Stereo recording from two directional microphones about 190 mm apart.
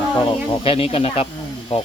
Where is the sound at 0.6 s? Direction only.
30° left (ahead or behind).